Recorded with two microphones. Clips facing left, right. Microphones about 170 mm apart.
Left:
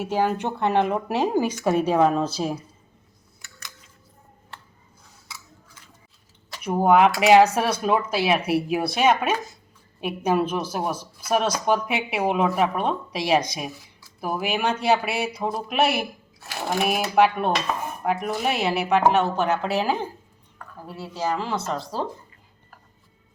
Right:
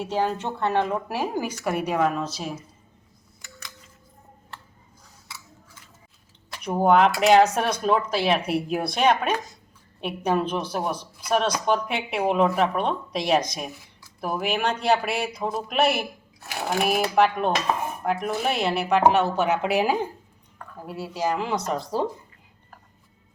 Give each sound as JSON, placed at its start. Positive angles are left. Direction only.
{"t": 0.0, "sound": "a woman's voice", "side_deg": 10}
{"t": 6.6, "sound": "a woman's voice", "side_deg": 5}
{"t": 19.5, "sound": "speech", "side_deg": -15}